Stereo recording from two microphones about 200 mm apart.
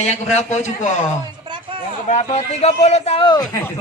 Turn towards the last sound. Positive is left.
turn(degrees=25)  # may be behind; listen again after turning